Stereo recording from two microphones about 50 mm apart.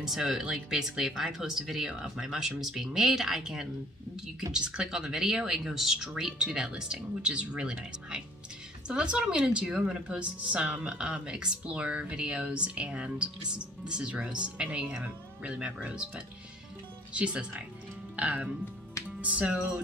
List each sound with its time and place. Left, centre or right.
0.0 s speech: centre; by 18.5 s right
19.0 s music: right